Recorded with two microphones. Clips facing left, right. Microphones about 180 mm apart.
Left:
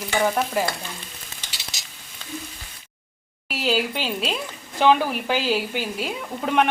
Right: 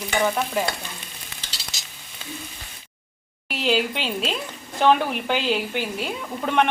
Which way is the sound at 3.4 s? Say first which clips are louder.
Right 1 dB; 5° left (ahead or behind).